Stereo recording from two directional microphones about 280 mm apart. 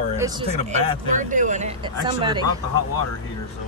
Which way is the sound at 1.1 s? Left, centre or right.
Right.